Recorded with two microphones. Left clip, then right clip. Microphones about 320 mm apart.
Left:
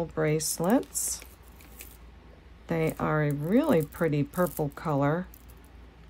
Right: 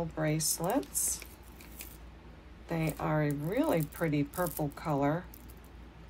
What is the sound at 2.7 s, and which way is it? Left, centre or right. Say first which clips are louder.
Speech: left 6 dB; left.